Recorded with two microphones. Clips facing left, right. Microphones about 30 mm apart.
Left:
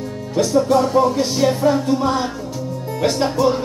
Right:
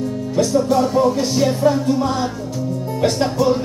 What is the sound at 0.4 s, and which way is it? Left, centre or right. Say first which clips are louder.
Music: left 1 dB; centre.